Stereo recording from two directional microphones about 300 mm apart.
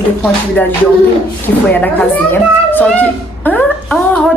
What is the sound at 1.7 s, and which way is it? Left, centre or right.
A woman's voice, centre.